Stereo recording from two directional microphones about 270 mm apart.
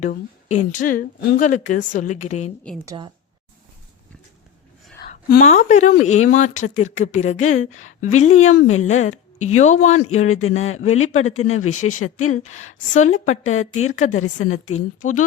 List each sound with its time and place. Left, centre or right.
0.0 s speech: left
2.8 s speech: centre
5.0 s speech: left
10.2 s a woman's voice: left
12.5 s speech: left
14.1 s a woman's voice: left
14.7 s speech: left